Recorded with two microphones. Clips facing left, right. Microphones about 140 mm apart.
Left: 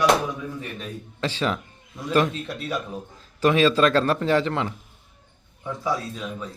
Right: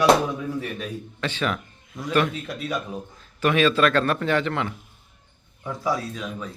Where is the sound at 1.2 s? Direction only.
30° left (ahead or behind).